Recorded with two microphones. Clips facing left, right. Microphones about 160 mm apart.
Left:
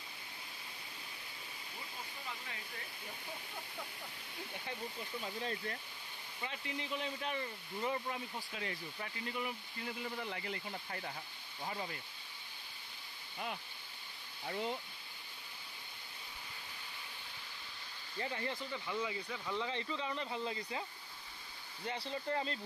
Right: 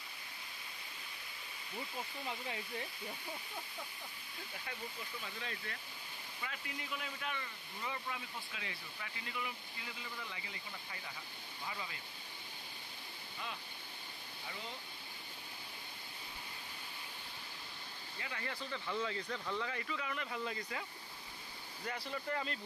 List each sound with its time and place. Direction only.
5.2 s speech: 35° left (ahead or behind)
18.2 s speech: 30° left (ahead or behind)
18.7 s speech: 15° left (ahead or behind)
19.5 s speech: 20° left (ahead or behind)
21.8 s speech: 30° left (ahead or behind)